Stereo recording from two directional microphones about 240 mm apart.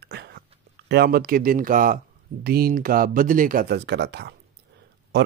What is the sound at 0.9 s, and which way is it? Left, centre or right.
Speech, right.